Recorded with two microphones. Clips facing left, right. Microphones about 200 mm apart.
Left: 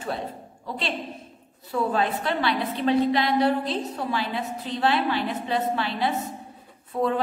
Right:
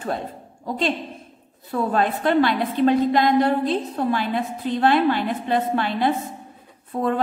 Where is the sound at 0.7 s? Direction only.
45° right (ahead or behind).